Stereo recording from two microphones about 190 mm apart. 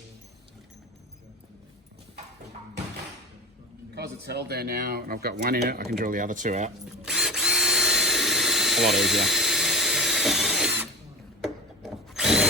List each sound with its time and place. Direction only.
3.9 s speech: 60° right (ahead or behind); by 6.7 s 40° right (ahead or behind)
7.0 s drill: 5° right (ahead or behind)